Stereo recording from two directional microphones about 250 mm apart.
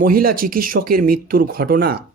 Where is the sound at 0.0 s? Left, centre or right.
Right.